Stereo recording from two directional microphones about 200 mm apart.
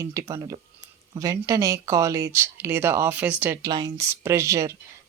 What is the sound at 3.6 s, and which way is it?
Speech, 20° right (ahead or behind).